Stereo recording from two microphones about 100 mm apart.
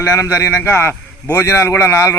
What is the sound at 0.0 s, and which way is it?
A man's voice, 30° left (ahead or behind).